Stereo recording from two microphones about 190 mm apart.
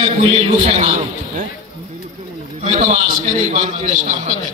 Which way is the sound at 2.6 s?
40° right (ahead or behind).